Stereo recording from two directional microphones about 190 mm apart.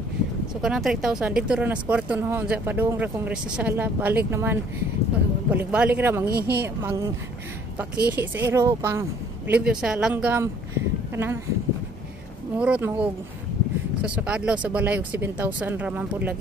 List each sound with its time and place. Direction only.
0.6 s speech: centre (ahead or behind)
6.3 s speech: 55° right (ahead or behind)
6.6 s speech: 10° right (ahead or behind)
12.5 s speech: 5° right (ahead or behind)